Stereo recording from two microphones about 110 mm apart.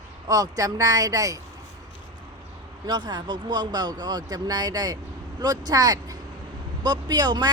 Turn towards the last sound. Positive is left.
turn(degrees=-40)  # may be behind; listen again after turning